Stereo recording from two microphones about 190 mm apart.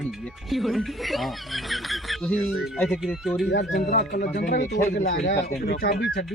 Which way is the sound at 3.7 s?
40° left (ahead or behind).